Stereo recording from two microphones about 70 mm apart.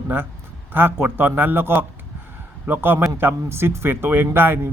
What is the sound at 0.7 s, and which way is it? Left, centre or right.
A man's voice, right.